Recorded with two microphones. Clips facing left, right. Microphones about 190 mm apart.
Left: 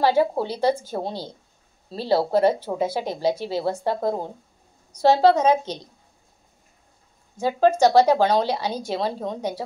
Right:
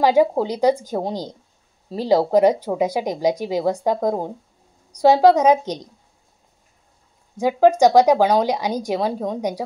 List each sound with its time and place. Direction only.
0.0 s speech: 15° right (ahead or behind)
7.3 s speech: 15° right (ahead or behind)